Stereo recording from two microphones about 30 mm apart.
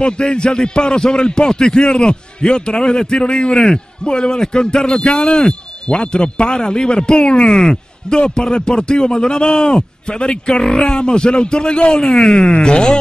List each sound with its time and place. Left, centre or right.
0.0 s a man's voice: left
10.6 s speech: centre
11.0 s a man's voice: left